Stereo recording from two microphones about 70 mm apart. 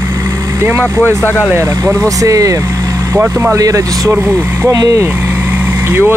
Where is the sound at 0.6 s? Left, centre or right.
Right.